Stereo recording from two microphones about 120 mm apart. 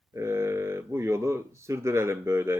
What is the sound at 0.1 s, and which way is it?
Speech, 20° right (ahead or behind).